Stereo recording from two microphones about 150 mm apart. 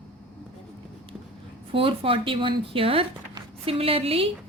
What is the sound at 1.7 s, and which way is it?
Speech, 35° right (ahead or behind).